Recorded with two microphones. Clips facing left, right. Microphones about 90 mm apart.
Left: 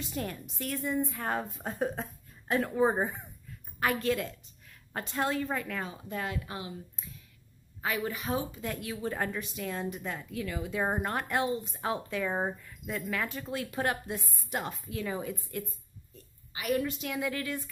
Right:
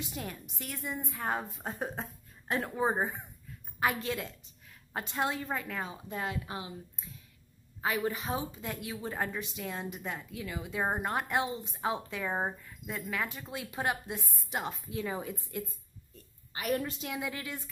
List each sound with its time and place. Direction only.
0.1 s a woman's voice: 15° right (ahead or behind)
2.7 s a woman's voice: 10° right (ahead or behind); by 6.7 s 25° right (ahead or behind)
7.8 s a woman's voice: 25° right (ahead or behind)
16.5 s a woman's voice: 40° right (ahead or behind)
17.1 s a woman's voice: 20° right (ahead or behind)